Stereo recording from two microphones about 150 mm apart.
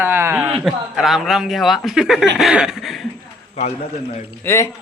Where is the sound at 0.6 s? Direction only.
5° right (ahead or behind).